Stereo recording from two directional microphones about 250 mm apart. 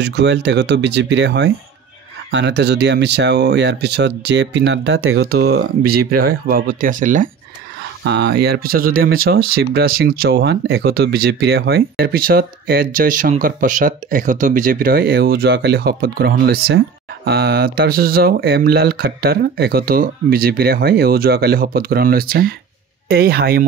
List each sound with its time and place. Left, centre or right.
0.0 s speech: right
5.9 s speech: right
8.0 s speech: right